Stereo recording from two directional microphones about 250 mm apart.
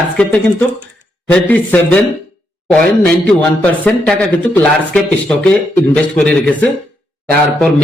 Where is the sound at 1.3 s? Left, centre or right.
Centre.